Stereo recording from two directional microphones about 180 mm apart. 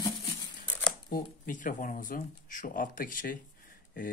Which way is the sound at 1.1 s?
45° left (ahead or behind).